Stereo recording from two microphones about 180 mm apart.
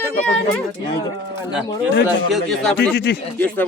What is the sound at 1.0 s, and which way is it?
Speech, 25° left (ahead or behind).